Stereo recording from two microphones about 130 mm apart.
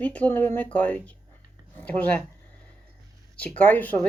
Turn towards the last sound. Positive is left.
turn(degrees=15)  # may be behind; listen again after turning